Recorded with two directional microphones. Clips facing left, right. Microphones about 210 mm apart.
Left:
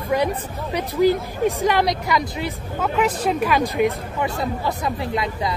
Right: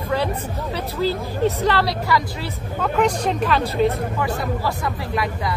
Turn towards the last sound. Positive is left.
turn(degrees=20)  # may be behind; listen again after turning